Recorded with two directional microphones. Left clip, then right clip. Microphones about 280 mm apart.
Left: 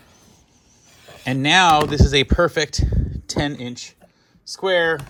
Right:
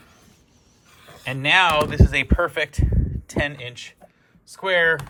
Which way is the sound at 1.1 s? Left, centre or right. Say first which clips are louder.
Left 2 dB; centre.